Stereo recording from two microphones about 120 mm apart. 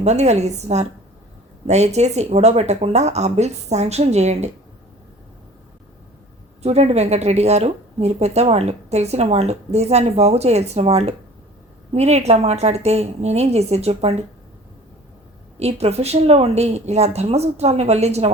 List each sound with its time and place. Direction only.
0.0 s speech: 70° right (ahead or behind)
6.6 s speech: 60° right (ahead or behind)
15.5 s speech: 60° right (ahead or behind)